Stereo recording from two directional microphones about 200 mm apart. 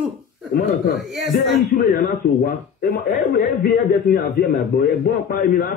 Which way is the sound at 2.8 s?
40° left (ahead or behind).